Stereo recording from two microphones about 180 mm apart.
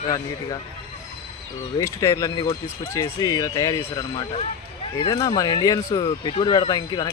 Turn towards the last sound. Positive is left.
turn(degrees=25)  # may be behind; listen again after turning